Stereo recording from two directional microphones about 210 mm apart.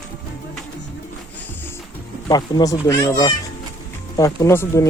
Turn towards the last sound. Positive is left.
turn(degrees=10)  # may be behind; listen again after turning